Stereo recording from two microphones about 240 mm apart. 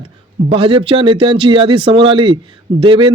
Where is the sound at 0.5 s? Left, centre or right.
Right.